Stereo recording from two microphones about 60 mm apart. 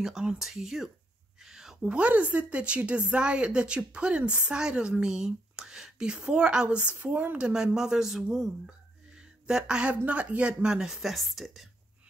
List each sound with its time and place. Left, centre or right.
0.0 s speech: centre
1.4 s a sound: centre
1.8 s a woman's voice: right; by 11.7 s centre